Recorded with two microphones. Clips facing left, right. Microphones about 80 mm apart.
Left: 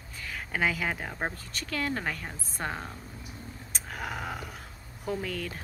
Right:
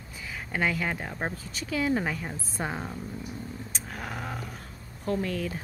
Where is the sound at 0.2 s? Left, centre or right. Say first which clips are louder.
Even; centre.